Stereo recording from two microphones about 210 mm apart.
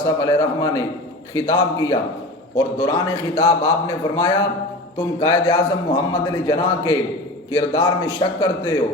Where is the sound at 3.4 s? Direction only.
15° left (ahead or behind).